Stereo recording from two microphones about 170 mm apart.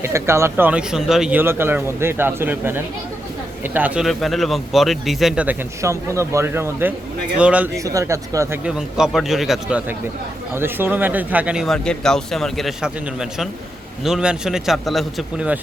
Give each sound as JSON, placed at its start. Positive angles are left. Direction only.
{"t": 0.0, "sound": "speech", "side_deg": -15}
{"t": 7.9, "sound": "speech", "side_deg": -20}
{"t": 8.6, "sound": "speech", "side_deg": -5}